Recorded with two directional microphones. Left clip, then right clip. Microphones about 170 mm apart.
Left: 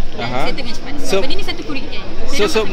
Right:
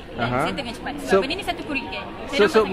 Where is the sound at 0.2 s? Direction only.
30° right (ahead or behind).